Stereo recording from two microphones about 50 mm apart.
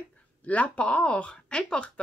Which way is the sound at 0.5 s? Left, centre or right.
Left.